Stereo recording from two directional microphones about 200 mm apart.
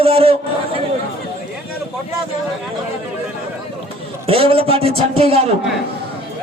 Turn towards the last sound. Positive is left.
turn(degrees=-30)  # may be behind; listen again after turning